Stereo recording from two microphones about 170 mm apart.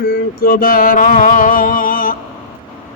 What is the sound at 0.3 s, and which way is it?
A man's voice, 60° left (ahead or behind).